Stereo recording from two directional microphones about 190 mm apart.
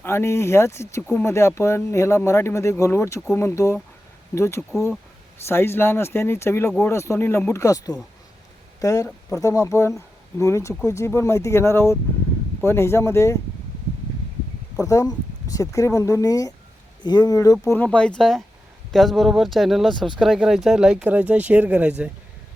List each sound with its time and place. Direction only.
0.0 s speech: 15° left (ahead or behind)
14.8 s speech: 20° left (ahead or behind); by 22.1 s 10° right (ahead or behind)